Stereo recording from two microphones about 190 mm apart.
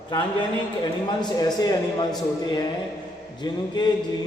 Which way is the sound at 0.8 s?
20° left (ahead or behind).